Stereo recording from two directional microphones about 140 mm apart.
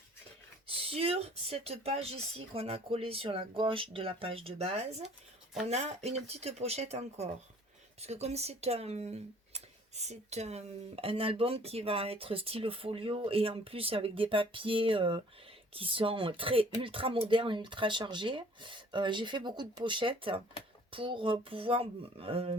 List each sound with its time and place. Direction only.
0.7 s speech: 45° right (ahead or behind)